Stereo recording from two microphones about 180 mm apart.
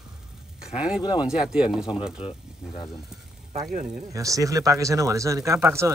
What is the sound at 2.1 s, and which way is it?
Speech, 25° left (ahead or behind).